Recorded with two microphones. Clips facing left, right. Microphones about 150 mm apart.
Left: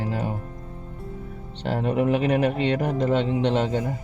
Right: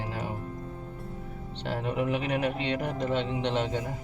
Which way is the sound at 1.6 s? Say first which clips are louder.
Left 7 dB; 40° left (ahead or behind).